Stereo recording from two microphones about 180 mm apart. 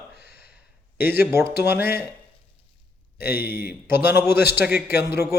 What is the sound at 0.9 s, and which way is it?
Speech, 10° right (ahead or behind).